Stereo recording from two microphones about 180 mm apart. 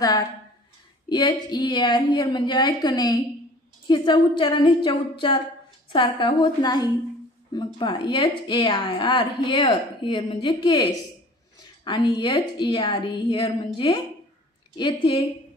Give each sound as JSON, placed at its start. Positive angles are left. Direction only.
{"t": 1.0, "sound": "a woman's voice", "side_deg": 25}